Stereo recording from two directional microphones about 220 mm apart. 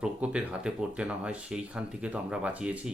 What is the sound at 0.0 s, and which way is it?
Speech, 5° right (ahead or behind).